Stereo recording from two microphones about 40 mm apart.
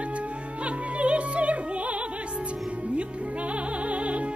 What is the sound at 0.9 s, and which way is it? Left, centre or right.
Music, right.